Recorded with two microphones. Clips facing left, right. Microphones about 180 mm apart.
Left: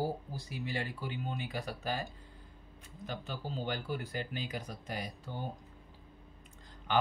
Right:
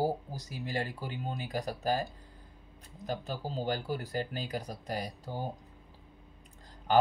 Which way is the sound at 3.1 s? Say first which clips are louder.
Right 4 dB; 40° right (ahead or behind).